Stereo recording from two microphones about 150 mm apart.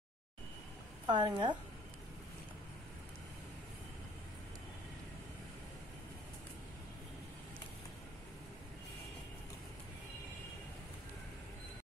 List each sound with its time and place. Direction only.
1.0 s a woman's voice: 30° right (ahead or behind)